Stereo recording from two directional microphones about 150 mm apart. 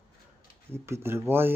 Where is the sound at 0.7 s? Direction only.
15° right (ahead or behind).